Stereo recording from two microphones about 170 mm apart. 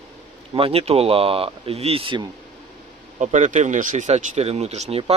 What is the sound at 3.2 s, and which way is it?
Speech, 45° right (ahead or behind).